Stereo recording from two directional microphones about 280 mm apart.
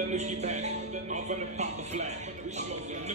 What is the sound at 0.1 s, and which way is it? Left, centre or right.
Speech, right.